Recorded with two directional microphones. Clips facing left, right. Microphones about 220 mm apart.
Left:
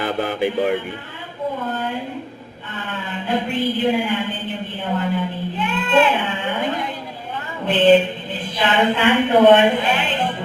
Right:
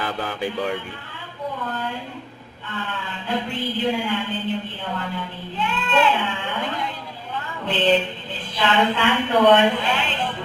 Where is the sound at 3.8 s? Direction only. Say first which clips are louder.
Left 4 dB; 15° left (ahead or behind).